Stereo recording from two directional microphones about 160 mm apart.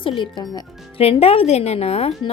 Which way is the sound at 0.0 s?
30° left (ahead or behind).